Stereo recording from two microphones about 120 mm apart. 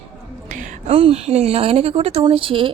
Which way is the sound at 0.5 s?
90° right.